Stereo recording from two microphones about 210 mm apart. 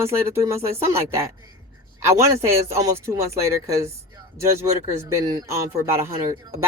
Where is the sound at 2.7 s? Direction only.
15° right (ahead or behind).